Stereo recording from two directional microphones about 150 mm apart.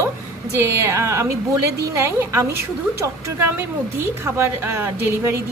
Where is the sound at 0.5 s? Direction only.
15° right (ahead or behind).